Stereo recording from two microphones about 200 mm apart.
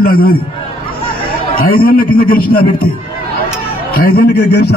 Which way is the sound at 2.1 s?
50° left (ahead or behind).